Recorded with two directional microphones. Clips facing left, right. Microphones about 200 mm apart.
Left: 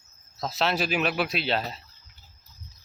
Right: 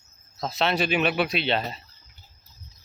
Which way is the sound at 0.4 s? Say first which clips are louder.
Right 2 dB; centre (ahead or behind).